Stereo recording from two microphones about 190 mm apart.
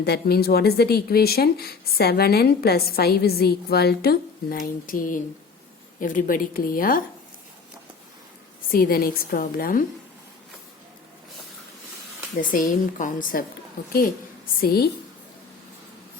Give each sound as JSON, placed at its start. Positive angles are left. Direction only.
{"t": 0.0, "sound": "a woman's voice", "side_deg": 55}
{"t": 8.7, "sound": "a woman's voice", "side_deg": 50}
{"t": 12.4, "sound": "a woman's voice", "side_deg": 45}
{"t": 14.6, "sound": "speech", "side_deg": 55}